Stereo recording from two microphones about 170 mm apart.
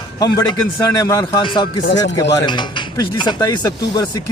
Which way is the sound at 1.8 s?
90° left.